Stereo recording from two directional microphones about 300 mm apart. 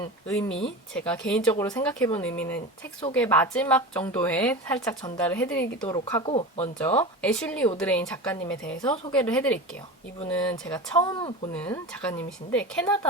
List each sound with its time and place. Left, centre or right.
0.3 s speech: centre
7.2 s speech: centre
11.5 s speech: centre